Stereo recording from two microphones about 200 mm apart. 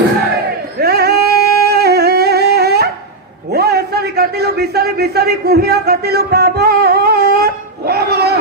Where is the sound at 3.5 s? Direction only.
50° right (ahead or behind).